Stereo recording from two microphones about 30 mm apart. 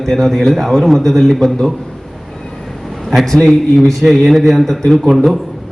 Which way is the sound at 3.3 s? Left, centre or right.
Centre.